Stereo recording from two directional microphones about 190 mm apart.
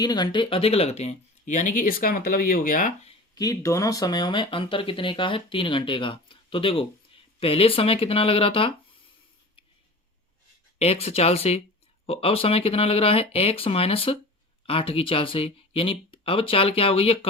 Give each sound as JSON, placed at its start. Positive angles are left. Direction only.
{"t": 0.0, "sound": "speech", "side_deg": 20}
{"t": 3.3, "sound": "speech", "side_deg": 20}
{"t": 10.8, "sound": "speech", "side_deg": 30}